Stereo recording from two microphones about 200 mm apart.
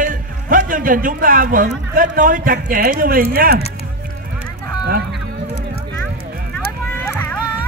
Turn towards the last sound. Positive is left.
turn(degrees=10)  # may be behind; listen again after turning